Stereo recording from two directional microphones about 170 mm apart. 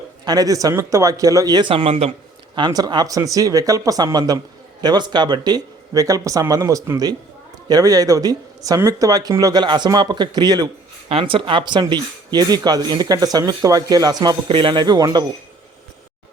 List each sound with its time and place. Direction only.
0.3 s speech: 20° right (ahead or behind); by 2.1 s 35° right (ahead or behind)
2.6 s speech: 25° right (ahead or behind)